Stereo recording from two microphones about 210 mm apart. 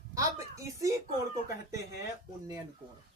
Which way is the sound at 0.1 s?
15° right (ahead or behind).